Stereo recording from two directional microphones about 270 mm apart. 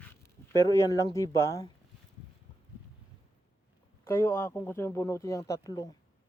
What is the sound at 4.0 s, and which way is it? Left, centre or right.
Speech, centre.